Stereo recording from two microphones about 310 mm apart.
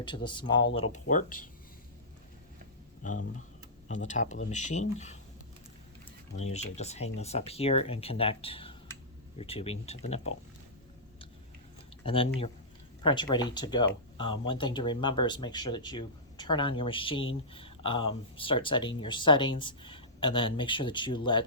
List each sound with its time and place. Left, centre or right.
0.0 s speech: centre
3.0 s speech: left
6.3 s speech: left
12.0 s speech: centre